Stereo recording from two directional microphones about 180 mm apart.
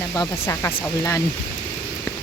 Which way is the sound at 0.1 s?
15° left (ahead or behind).